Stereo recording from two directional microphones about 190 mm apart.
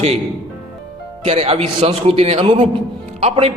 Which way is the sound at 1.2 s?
30° right (ahead or behind).